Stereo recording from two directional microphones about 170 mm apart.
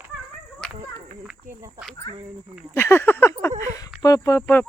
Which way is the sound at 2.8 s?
15° left (ahead or behind).